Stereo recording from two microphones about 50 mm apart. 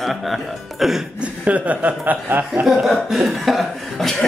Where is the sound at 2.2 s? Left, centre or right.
Right.